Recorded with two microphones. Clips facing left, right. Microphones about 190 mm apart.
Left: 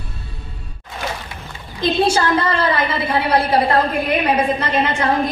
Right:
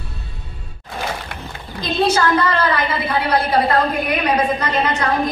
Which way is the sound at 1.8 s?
25° left (ahead or behind).